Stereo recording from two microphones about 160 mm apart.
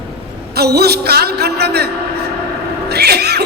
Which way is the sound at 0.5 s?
85° right.